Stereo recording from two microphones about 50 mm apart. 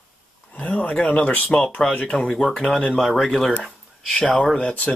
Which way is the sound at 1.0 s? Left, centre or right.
Left.